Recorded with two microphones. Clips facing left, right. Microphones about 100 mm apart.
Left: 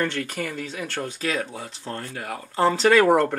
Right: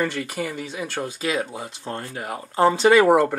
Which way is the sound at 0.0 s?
5° right (ahead or behind).